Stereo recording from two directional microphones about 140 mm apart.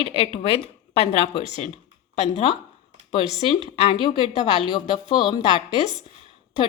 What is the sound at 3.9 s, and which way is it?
Speech, 40° left (ahead or behind).